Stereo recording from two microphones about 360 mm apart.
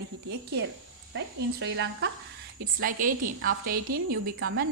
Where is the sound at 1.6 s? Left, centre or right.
Right.